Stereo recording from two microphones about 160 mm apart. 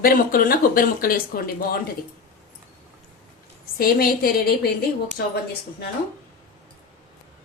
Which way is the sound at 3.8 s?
70° left (ahead or behind).